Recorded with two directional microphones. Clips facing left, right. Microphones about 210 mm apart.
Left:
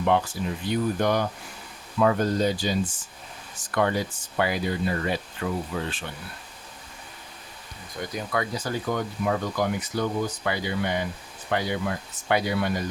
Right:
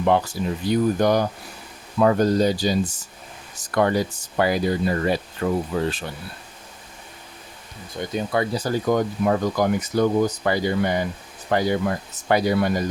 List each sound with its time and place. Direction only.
0.0 s speech: 40° right (ahead or behind)
7.9 s speech: 30° right (ahead or behind)